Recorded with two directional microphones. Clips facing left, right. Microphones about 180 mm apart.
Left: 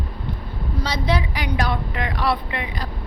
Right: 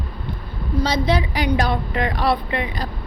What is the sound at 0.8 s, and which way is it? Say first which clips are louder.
A woman's voice: right 4 dB; 25° right (ahead or behind).